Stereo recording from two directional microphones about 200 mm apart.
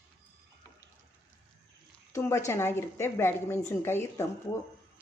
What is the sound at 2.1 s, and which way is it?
A woman's voice, 15° left (ahead or behind).